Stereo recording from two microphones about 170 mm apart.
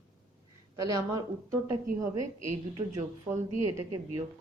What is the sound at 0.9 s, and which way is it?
Speech, 20° right (ahead or behind).